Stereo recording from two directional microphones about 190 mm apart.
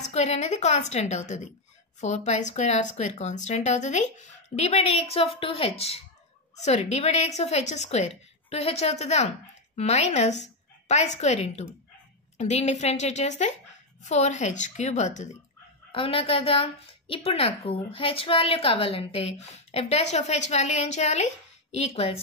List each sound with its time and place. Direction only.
0.0 s a woman's voice: 35° left (ahead or behind)
15.9 s a woman's voice: 30° left (ahead or behind)